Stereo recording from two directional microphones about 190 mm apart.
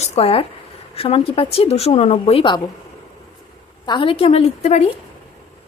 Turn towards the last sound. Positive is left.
turn(degrees=35)  # may be behind; listen again after turning